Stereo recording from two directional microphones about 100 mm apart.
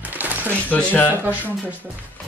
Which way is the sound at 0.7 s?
15° left (ahead or behind).